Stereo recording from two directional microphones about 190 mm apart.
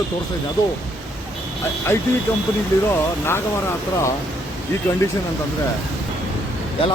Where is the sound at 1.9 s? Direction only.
15° left (ahead or behind).